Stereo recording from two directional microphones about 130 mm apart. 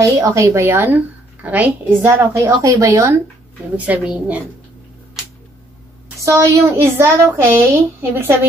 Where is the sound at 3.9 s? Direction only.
10° right (ahead or behind).